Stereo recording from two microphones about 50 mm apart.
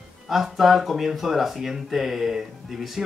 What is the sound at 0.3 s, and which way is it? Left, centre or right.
Speech, centre.